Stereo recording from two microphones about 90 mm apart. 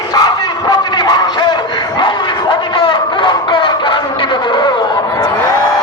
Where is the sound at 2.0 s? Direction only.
70° left (ahead or behind).